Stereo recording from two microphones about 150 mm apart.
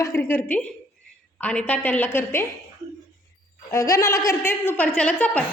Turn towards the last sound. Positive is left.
turn(degrees=10)  # may be behind; listen again after turning